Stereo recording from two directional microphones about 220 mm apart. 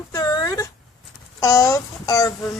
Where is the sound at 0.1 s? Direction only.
15° left (ahead or behind).